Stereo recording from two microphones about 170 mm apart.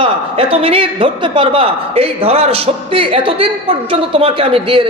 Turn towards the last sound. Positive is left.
turn(degrees=-30)  # may be behind; listen again after turning